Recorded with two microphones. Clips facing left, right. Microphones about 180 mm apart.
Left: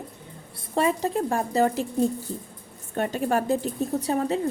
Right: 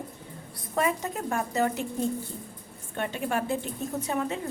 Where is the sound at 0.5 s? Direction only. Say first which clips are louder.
Left 4 dB; 30° left (ahead or behind).